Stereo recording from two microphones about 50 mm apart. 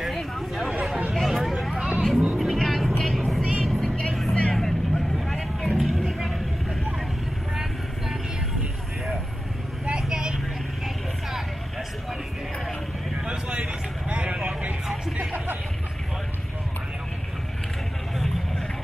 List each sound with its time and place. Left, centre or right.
0.0 s a sound: centre
1.1 s vehicle: centre
1.7 s vehicle: centre
2.3 s music: centre
3.0 s vehicle: centre
4.6 s vehicle: centre
5.8 s vehicle: centre
10.0 s vehicle: centre
13.2 s vehicle: centre